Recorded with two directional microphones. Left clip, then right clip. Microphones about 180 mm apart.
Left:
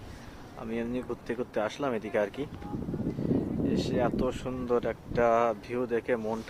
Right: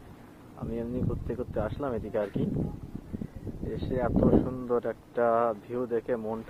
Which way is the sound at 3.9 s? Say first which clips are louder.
Right 9 dB; 20° left (ahead or behind).